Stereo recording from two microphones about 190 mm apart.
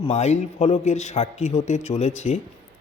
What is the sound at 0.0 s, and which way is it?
A man's voice, 35° left (ahead or behind).